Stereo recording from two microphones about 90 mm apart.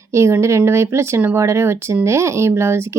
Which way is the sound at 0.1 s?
30° right (ahead or behind).